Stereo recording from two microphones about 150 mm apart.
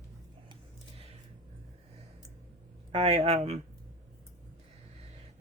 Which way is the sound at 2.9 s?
45° right (ahead or behind).